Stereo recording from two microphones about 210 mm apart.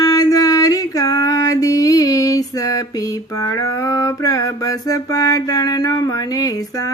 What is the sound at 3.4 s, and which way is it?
Mantra, 15° left (ahead or behind).